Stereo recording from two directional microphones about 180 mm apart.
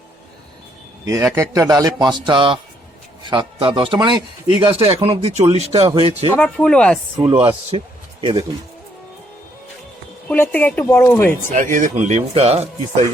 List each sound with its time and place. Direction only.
1.0 s speech: 20° right (ahead or behind); by 6.3 s 35° right (ahead or behind)
6.3 s speech: 5° left (ahead or behind)
7.2 s speech: 25° right (ahead or behind)
10.2 s speech: 10° left (ahead or behind)
11.5 s speech: 45° right (ahead or behind)